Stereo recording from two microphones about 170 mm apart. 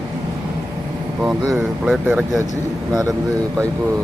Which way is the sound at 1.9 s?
5° right (ahead or behind).